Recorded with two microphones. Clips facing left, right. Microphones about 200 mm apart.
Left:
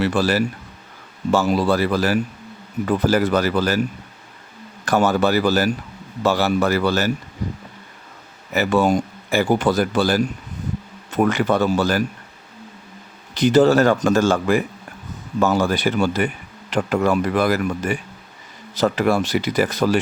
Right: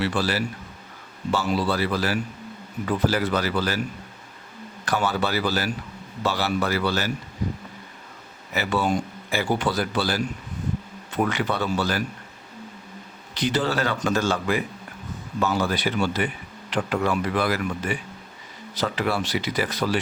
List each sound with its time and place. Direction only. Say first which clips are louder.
0.0 s speech: left 6 dB; 45° left (ahead or behind)
4.9 s speech: left 7 dB; 45° left (ahead or behind)
8.5 s speech: left 6 dB; 45° left (ahead or behind)
13.3 s speech: left 10 dB; 45° left (ahead or behind)